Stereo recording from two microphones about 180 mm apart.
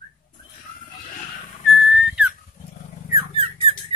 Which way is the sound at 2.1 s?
5° right (ahead or behind).